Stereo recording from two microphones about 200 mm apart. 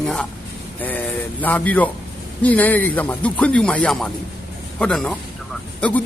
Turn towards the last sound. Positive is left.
turn(degrees=5)  # may be behind; listen again after turning